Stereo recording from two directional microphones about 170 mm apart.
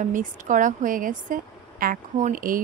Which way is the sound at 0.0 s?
50° right (ahead or behind).